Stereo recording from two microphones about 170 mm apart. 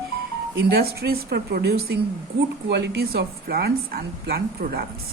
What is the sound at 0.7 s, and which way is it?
A woman's voice, 65° right (ahead or behind).